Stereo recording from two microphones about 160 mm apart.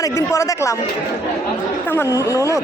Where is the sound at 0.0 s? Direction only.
15° left (ahead or behind).